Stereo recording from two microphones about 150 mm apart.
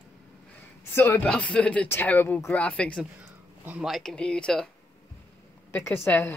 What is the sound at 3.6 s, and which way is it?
Speech, 10° right (ahead or behind).